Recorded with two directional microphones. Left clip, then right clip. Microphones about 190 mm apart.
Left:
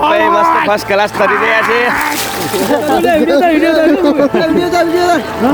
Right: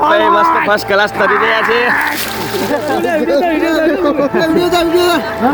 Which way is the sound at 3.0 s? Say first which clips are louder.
Left 3 dB; 55° left (ahead or behind).